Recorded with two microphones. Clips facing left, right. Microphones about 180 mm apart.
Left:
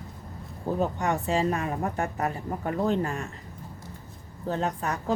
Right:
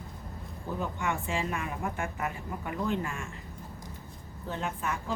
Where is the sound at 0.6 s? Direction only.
40° left (ahead or behind).